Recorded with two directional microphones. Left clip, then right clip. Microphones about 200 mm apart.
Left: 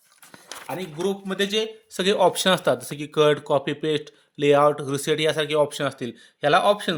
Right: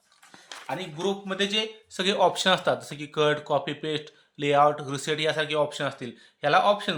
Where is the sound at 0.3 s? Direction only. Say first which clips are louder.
Left 1 dB; 50° left (ahead or behind).